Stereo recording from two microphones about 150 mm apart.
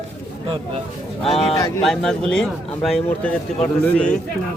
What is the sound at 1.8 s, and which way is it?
A man's voice, centre (ahead or behind).